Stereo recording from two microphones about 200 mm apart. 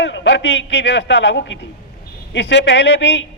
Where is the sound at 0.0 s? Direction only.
65° left (ahead or behind).